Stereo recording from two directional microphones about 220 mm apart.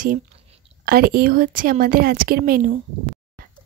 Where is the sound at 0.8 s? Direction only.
40° right (ahead or behind).